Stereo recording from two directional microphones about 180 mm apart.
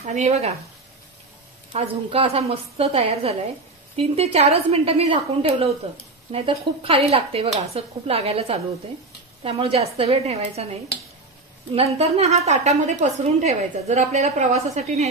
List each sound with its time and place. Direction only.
0.1 s a woman's voice: 35° right (ahead or behind)
1.7 s a woman's voice: 35° right (ahead or behind)